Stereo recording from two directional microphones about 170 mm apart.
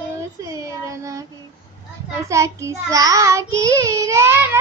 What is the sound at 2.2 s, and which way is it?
A child's voice, 15° right (ahead or behind).